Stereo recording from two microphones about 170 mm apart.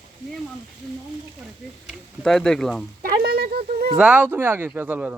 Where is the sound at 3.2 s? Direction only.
65° right (ahead or behind).